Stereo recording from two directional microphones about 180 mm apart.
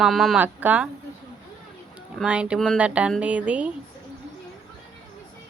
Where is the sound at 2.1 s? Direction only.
5° right (ahead or behind).